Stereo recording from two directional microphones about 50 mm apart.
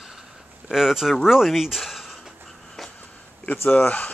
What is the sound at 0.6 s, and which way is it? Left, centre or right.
Speech, centre.